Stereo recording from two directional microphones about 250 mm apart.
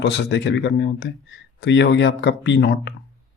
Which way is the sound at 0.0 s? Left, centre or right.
Left.